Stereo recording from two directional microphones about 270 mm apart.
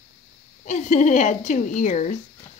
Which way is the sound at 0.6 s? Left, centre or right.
Left.